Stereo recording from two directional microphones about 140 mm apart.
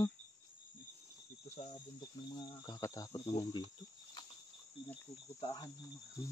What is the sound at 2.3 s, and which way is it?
Speech, 30° left (ahead or behind).